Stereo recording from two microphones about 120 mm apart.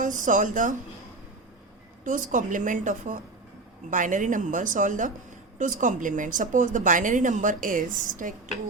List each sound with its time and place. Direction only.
0.0 s a woman's voice: 90° right
2.0 s a woman's voice: 90° right